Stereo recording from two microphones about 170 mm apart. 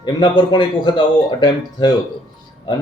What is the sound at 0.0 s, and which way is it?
Speech, 25° left (ahead or behind).